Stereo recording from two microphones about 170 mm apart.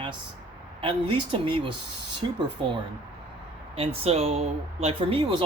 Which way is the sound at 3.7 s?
35° right (ahead or behind).